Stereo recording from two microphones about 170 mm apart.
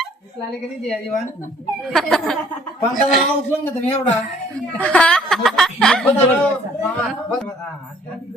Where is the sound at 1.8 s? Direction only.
Centre (ahead or behind).